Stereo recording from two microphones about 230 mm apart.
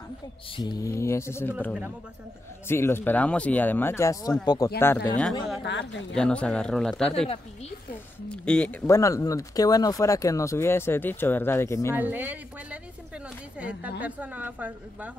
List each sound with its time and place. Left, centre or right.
0.6 s speech: centre
1.6 s speech: centre
5.6 s speech: left
6.1 s speech: centre
8.3 s speech: centre
11.9 s a woman's voice: centre
13.6 s a woman's voice: centre